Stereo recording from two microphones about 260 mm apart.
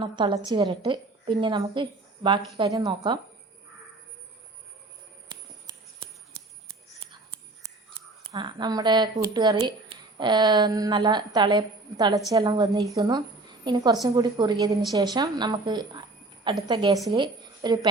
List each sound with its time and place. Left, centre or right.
0.0 s a woman's voice: centre
5.3 s a sound: centre
7.6 s a woman's voice: centre